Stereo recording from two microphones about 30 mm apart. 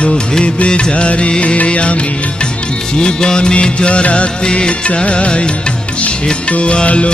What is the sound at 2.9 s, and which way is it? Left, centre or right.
Music, left.